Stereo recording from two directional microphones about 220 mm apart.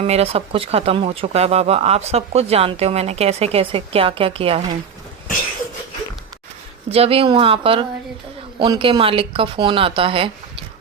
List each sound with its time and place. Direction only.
0.0 s speech: 25° right (ahead or behind)
6.9 s speech: 25° right (ahead or behind)